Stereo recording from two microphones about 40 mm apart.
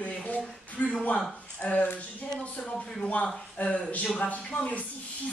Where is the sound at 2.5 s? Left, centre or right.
Left.